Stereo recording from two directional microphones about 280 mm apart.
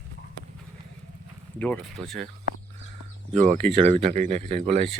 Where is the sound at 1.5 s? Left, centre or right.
Centre.